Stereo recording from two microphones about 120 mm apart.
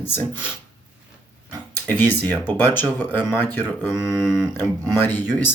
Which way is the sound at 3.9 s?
5° right (ahead or behind).